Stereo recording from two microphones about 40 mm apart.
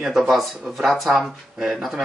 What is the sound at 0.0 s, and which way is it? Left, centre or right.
Speech, centre.